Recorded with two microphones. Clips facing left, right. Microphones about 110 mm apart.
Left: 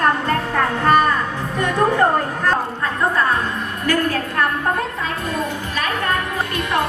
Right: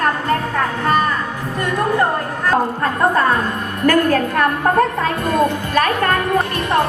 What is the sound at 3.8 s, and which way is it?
Music, 50° right (ahead or behind).